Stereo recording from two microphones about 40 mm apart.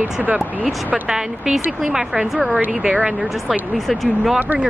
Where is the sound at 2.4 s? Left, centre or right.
Right.